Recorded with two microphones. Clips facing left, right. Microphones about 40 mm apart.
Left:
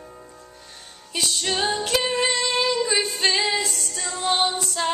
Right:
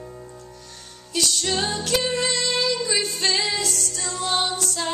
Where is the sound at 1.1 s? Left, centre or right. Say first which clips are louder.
Right 1 dB; centre.